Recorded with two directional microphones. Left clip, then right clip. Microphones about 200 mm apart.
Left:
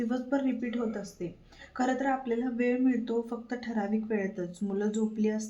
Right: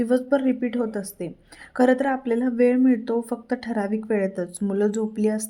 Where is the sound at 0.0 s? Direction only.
55° right (ahead or behind).